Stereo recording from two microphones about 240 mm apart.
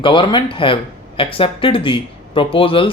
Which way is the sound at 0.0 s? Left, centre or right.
Centre.